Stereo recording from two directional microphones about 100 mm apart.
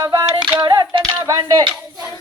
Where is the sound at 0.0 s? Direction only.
45° right (ahead or behind).